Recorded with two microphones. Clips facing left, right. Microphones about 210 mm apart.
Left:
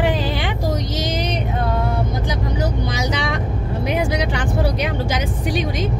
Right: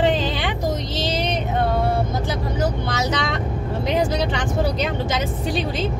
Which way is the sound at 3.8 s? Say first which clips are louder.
Even; 10° left (ahead or behind).